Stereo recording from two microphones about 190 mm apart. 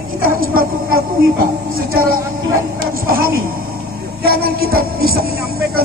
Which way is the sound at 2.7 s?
50° right (ahead or behind).